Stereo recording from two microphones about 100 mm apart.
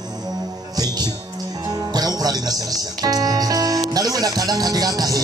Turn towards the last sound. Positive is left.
turn(degrees=-40)  # may be behind; listen again after turning